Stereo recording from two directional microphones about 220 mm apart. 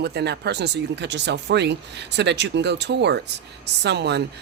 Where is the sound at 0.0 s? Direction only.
50° right (ahead or behind).